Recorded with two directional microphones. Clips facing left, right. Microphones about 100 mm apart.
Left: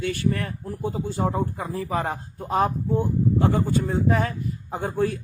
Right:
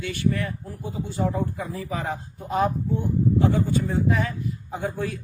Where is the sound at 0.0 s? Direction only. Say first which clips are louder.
Left 1 dB; 40° left (ahead or behind).